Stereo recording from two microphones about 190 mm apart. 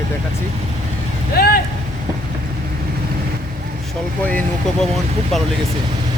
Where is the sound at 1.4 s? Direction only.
55° left (ahead or behind).